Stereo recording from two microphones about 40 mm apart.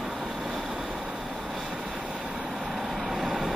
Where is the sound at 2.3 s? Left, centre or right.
Centre.